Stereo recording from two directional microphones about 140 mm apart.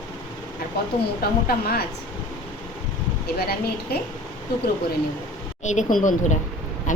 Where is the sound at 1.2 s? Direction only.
90° left.